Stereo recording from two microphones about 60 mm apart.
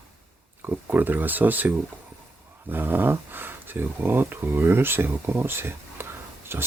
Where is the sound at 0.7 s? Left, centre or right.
Right.